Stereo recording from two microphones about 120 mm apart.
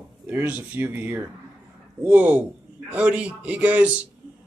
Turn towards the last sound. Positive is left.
turn(degrees=-15)  # may be behind; listen again after turning